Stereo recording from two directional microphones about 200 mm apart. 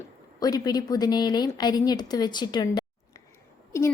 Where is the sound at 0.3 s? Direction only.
20° left (ahead or behind).